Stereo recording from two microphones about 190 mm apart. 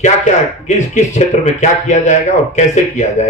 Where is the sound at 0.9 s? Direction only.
40° left (ahead or behind).